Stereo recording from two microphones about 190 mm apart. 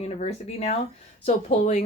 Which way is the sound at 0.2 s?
35° left (ahead or behind).